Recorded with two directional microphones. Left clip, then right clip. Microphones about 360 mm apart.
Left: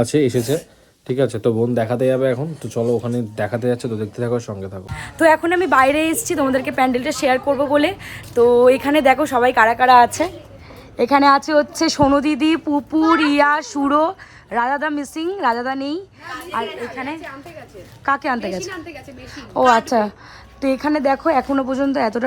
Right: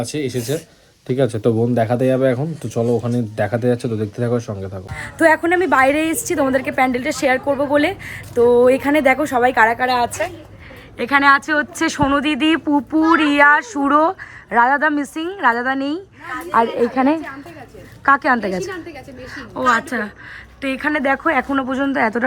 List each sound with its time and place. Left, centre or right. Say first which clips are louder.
0.0 s speech: left 6 dB; left
1.0 s speech: right 1 dB; centre